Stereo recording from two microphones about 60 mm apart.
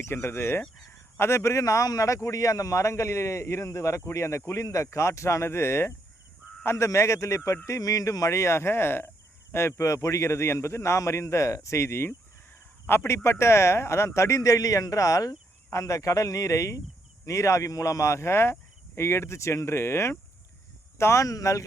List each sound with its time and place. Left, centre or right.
0.0 s a man's voice: left
1.6 s speech: left
2.3 s a man's voice: left
8.4 s a man's voice: left
21.2 s speech: left